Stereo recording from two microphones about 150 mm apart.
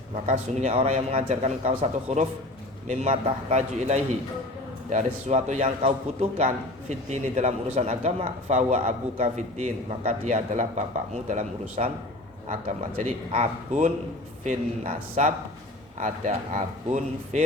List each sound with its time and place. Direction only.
0.3 s a man's voice: 45° right (ahead or behind)